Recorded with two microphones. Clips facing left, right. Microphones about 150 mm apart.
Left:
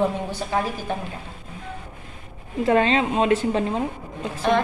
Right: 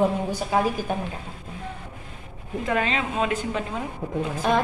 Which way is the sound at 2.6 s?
30° left (ahead or behind).